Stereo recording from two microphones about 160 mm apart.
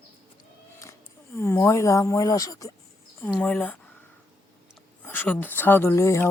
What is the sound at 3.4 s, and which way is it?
Speech, 10° left (ahead or behind).